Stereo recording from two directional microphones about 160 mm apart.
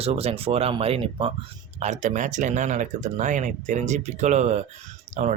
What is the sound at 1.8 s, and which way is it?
Speech, 50° right (ahead or behind).